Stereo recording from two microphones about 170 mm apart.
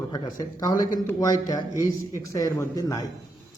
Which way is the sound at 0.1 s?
20° left (ahead or behind).